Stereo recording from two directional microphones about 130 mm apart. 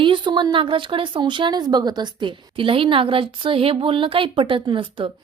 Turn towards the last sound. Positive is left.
turn(degrees=-40)  # may be behind; listen again after turning